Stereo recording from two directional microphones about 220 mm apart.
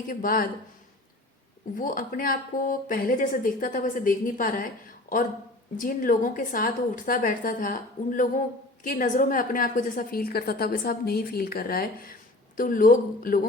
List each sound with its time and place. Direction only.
0.1 s speech: 40° left (ahead or behind)
1.7 s speech: 40° left (ahead or behind)